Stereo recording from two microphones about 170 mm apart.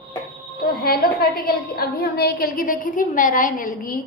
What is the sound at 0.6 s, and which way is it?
A woman's voice, 60° left (ahead or behind).